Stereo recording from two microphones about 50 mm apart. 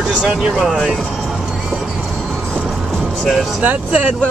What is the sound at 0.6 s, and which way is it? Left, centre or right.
Speech, centre.